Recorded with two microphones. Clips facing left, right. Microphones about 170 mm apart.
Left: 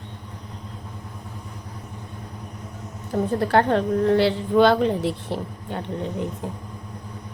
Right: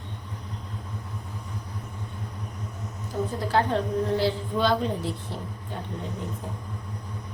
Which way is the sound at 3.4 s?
60° left (ahead or behind).